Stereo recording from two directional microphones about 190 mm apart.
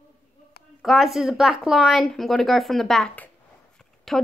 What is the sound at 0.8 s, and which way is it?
Speech, centre (ahead or behind).